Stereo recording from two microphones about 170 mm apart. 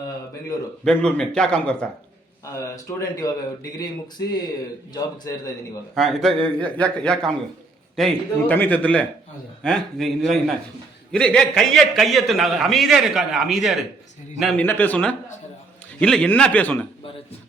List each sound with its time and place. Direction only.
0.9 s a man's voice: 5° left (ahead or behind)
2.6 s a man's voice: 20° left (ahead or behind)
4.9 s a man's voice: 20° left (ahead or behind)
5.9 s a man's voice: centre (ahead or behind)
14.6 s a man's voice: 10° left (ahead or behind)